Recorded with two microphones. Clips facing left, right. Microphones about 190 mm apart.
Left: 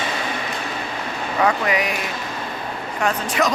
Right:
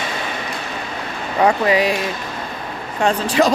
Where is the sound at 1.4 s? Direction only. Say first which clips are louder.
Right 5 dB; 30° right (ahead or behind).